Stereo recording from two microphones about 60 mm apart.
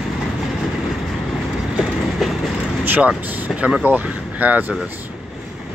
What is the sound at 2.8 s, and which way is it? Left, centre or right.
Vehicle, right.